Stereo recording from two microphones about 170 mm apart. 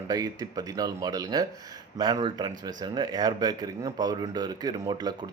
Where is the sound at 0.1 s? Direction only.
20° right (ahead or behind).